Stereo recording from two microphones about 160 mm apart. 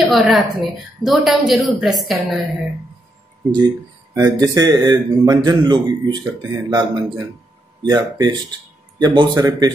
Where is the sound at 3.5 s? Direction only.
25° right (ahead or behind).